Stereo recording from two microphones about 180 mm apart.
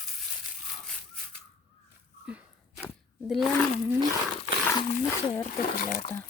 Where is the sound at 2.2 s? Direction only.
5° right (ahead or behind).